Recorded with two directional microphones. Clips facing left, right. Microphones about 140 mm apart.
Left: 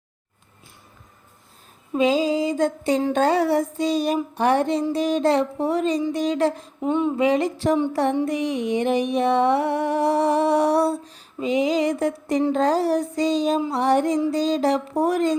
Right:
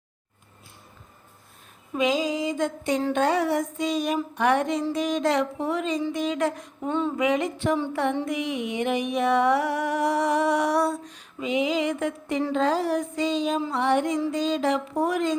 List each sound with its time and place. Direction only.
1.9 s music: 30° left (ahead or behind)
6.8 s speech: 15° left (ahead or behind)
7.2 s music: 35° left (ahead or behind)